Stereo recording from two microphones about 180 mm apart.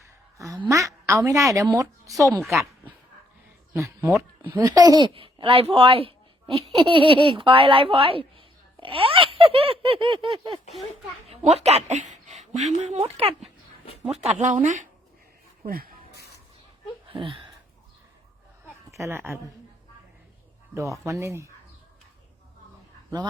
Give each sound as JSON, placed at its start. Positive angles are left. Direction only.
{"t": 0.3, "sound": "a sound", "side_deg": -20}
{"t": 1.5, "sound": "a woman's voice", "side_deg": -20}
{"t": 2.4, "sound": "speech", "side_deg": 0}
{"t": 4.5, "sound": "a woman's voice", "side_deg": -20}
{"t": 17.1, "sound": "a sound", "side_deg": -30}
{"t": 18.9, "sound": "a woman's voice", "side_deg": -15}
{"t": 20.7, "sound": "a woman's voice", "side_deg": -15}